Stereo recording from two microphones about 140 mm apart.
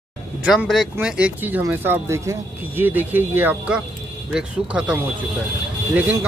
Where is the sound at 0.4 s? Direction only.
5° right (ahead or behind).